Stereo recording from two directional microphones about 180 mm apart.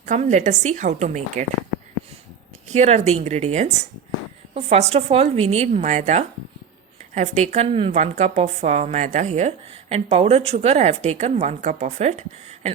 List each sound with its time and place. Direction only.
0.0 s a woman's voice: 40° right (ahead or behind)
2.6 s a woman's voice: 40° right (ahead or behind)